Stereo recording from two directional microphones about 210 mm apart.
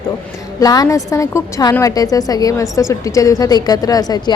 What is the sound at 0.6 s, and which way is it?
A woman's voice, 15° left (ahead or behind).